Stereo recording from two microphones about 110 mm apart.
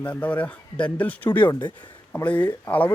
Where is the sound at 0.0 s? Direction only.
10° left (ahead or behind).